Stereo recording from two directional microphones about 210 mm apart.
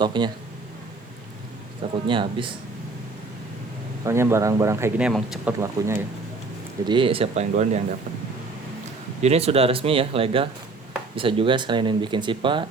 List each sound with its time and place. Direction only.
0.0 s speech: 20° right (ahead or behind)
1.8 s speech: 25° right (ahead or behind)
4.0 s speech: 10° right (ahead or behind)
6.8 s speech: 25° right (ahead or behind)
9.2 s speech: 30° right (ahead or behind)